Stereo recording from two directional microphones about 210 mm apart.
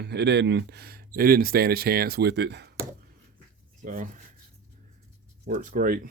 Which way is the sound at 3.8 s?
40° right (ahead or behind).